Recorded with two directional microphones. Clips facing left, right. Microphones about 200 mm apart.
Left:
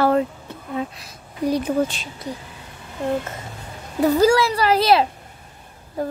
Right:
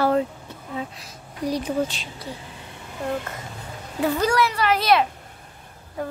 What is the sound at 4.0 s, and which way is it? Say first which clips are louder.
Speech: left 5 dB; 30° left (ahead or behind).